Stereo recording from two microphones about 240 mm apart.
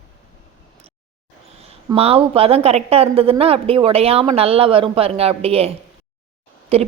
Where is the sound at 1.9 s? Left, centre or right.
Right.